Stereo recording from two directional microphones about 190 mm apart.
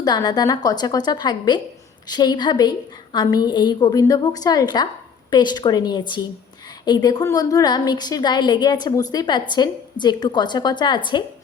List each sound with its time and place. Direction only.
0.0 s a woman's voice: 20° left (ahead or behind)